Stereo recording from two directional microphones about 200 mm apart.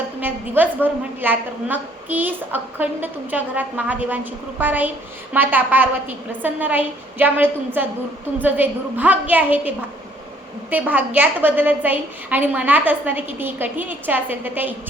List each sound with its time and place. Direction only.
0.2 s a woman's voice: 10° right (ahead or behind)